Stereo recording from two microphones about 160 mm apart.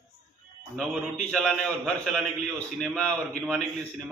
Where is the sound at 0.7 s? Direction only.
5° left (ahead or behind).